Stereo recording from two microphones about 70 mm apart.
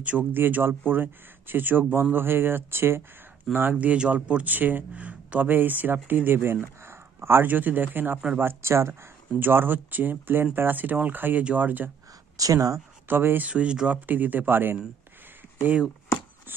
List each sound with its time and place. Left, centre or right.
0.0 s speech: right
3.5 s speech: right
12.4 s speech: right
13.1 s speech: right
13.5 s speech: centre